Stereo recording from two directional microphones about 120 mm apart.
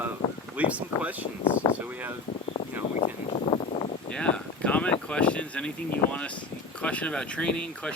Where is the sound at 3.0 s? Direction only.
55° left (ahead or behind).